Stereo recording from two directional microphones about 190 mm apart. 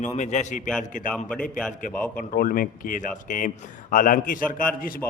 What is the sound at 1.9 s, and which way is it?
A man's voice, 40° left (ahead or behind).